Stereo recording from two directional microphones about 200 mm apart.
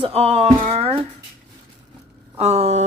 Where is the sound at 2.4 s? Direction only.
35° right (ahead or behind).